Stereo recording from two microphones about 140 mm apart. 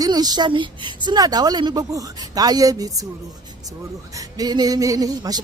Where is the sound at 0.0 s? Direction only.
30° right (ahead or behind).